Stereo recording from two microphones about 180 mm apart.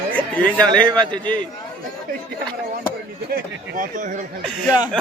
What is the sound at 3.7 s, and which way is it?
Speech, 45° right (ahead or behind).